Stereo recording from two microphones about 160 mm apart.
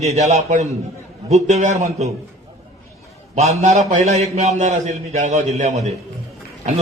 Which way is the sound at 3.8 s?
45° right (ahead or behind).